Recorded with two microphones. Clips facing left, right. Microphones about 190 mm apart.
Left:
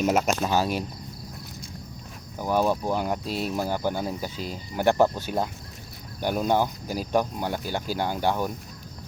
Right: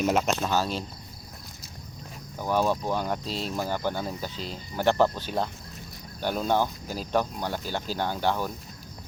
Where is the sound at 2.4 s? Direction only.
10° left (ahead or behind).